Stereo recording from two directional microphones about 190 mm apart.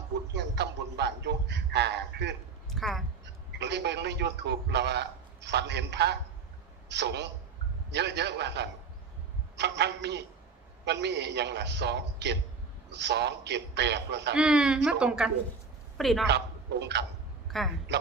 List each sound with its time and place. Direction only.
0.3 s a man's voice: 60° right (ahead or behind)
2.7 s speech: centre (ahead or behind)
3.6 s a man's voice: 65° right (ahead or behind)
14.3 s a woman's voice: 5° right (ahead or behind)
16.8 s a man's voice: 65° right (ahead or behind)
17.5 s speech: centre (ahead or behind)